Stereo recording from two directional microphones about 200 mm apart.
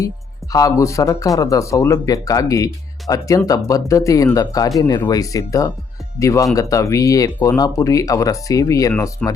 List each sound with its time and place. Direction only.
0.5 s speech: 15° left (ahead or behind)